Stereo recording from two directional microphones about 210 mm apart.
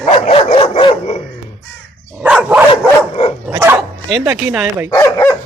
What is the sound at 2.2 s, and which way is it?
Dog, 5° right (ahead or behind).